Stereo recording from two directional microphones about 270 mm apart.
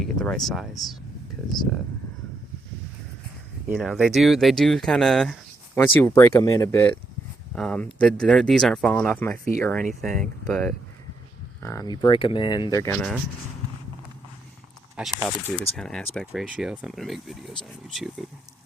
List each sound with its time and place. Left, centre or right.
0.0 s speech: centre
3.8 s speech: centre
14.9 s speech: centre